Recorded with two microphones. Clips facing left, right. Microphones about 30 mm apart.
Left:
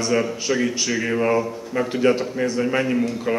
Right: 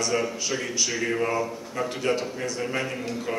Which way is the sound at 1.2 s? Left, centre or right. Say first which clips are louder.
Left 6 dB; centre.